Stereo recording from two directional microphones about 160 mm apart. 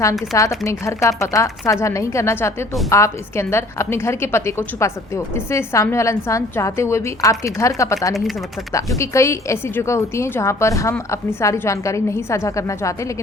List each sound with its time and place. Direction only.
0.0 s a woman's voice: 20° left (ahead or behind)
9.0 s a woman's voice: 20° left (ahead or behind)